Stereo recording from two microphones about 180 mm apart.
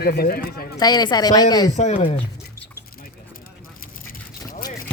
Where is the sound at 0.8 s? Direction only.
20° left (ahead or behind).